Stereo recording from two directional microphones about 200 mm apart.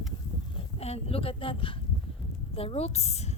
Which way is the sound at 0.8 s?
30° left (ahead or behind).